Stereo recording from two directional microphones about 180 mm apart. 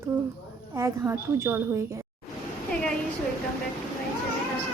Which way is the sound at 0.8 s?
15° right (ahead or behind).